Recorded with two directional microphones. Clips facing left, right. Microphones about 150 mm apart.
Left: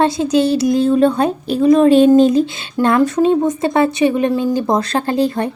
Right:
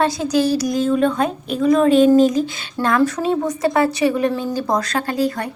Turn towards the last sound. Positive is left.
turn(degrees=25)  # may be behind; listen again after turning